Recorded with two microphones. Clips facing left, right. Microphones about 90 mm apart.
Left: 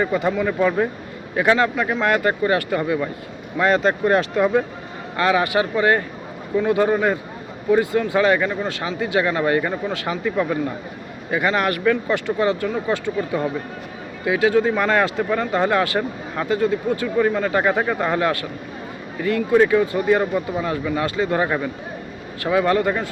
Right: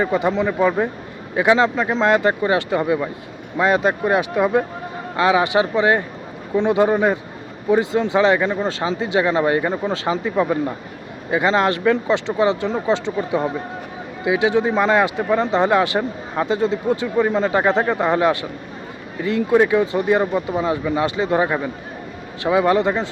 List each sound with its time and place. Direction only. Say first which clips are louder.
0.0 s speech: right 1 dB; 20° right (ahead or behind)